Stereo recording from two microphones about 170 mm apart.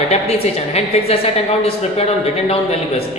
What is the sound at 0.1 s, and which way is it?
A woman's voice, 40° left (ahead or behind).